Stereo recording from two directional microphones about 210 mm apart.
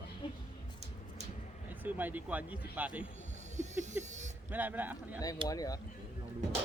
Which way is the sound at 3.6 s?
35° right (ahead or behind).